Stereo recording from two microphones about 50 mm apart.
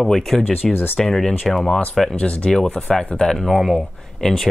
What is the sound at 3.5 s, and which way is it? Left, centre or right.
Speech, centre.